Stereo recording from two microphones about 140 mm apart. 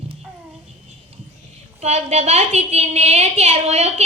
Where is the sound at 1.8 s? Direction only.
50° right (ahead or behind).